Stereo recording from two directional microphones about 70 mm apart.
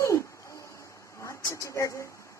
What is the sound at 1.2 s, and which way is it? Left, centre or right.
Speech, left.